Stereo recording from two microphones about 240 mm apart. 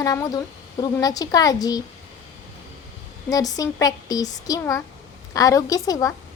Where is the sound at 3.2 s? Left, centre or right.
Centre.